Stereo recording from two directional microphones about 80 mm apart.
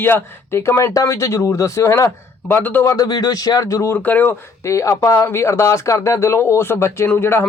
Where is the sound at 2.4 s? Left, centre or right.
Left.